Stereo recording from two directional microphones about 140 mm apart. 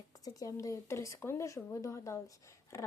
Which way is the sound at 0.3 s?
25° left (ahead or behind).